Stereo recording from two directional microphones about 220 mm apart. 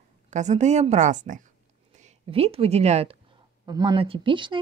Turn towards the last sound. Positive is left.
turn(degrees=-20)  # may be behind; listen again after turning